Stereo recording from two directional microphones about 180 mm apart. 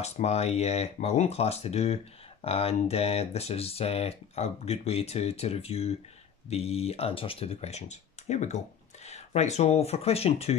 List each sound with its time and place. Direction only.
0.0 s speech: 35° left (ahead or behind)